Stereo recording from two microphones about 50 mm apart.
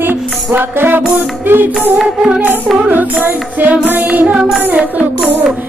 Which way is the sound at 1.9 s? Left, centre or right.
Centre.